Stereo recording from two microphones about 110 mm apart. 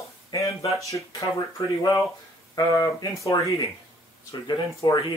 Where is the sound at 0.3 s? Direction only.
35° left (ahead or behind).